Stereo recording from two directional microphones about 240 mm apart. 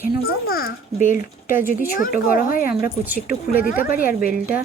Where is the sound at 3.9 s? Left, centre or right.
Left.